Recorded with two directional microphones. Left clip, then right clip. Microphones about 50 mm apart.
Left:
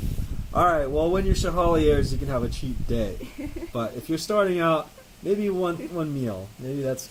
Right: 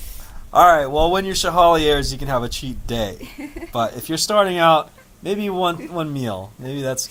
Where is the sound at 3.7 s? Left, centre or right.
Right.